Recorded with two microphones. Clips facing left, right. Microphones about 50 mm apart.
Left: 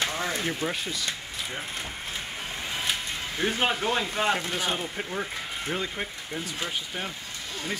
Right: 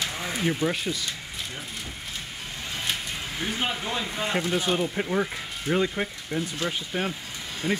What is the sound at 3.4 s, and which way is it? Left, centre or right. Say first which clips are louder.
Speech: left 4 dB; left.